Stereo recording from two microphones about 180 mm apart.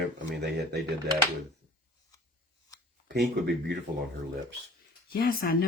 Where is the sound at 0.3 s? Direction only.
65° right (ahead or behind).